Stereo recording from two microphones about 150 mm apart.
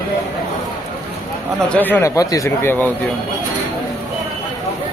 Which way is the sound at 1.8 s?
10° left (ahead or behind).